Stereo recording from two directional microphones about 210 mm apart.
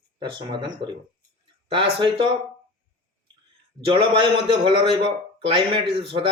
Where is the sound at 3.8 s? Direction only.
25° right (ahead or behind).